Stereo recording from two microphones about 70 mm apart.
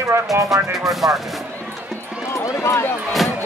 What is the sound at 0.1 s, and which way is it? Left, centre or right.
Speech, right.